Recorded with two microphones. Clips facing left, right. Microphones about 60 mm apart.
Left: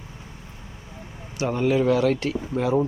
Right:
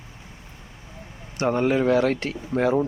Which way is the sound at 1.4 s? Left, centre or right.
Right.